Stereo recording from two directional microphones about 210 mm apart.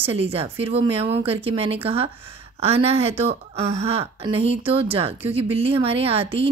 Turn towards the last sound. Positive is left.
turn(degrees=-25)  # may be behind; listen again after turning